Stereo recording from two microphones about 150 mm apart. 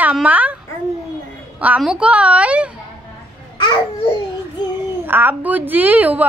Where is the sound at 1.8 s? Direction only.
5° right (ahead or behind).